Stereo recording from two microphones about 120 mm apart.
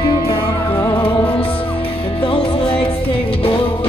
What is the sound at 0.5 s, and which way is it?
Music, 25° left (ahead or behind).